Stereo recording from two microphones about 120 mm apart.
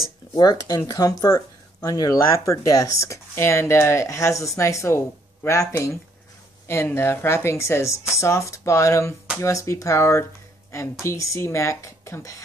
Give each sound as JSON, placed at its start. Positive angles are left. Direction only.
{"t": 0.3, "sound": "speech", "side_deg": 35}